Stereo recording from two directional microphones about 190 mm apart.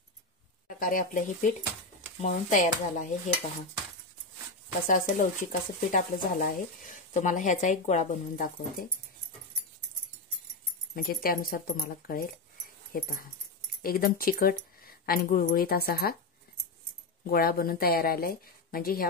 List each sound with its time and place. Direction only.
0.7 s speech: 45° left (ahead or behind)
4.8 s speech: 45° left (ahead or behind)
11.0 s speech: 50° left (ahead or behind)
12.9 s speech: 50° left (ahead or behind)
17.3 s speech: 50° left (ahead or behind)